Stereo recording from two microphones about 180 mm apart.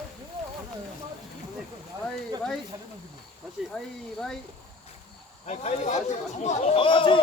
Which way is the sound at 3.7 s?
Centre (ahead or behind).